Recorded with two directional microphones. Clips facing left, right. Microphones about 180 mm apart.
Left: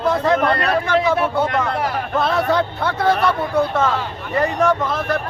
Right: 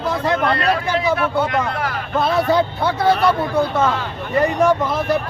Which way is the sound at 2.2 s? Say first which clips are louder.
Right 2 dB; 5° right (ahead or behind).